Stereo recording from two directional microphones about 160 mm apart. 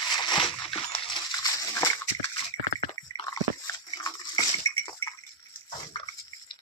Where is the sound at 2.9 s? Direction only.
25° left (ahead or behind).